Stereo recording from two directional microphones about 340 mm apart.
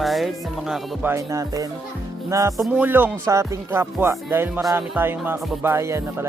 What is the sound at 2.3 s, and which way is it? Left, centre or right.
Music, centre.